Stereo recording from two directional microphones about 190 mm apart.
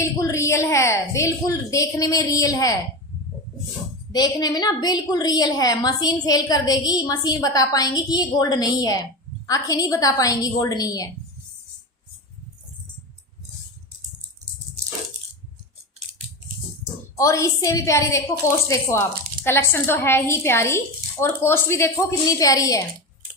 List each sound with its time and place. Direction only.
0.0 s a woman's voice: 15° left (ahead or behind)
4.1 s a woman's voice: 20° left (ahead or behind)
17.2 s a woman's voice: 15° left (ahead or behind)